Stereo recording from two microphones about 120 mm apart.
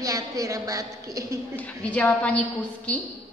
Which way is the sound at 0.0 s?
25° right (ahead or behind).